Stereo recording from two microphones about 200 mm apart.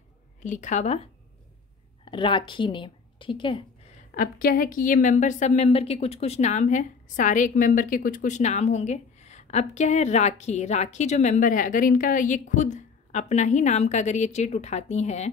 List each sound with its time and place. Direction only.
0.4 s a woman's voice: 40° left (ahead or behind)
2.0 s a woman's voice: 25° left (ahead or behind)
4.1 s a woman's voice: 45° left (ahead or behind)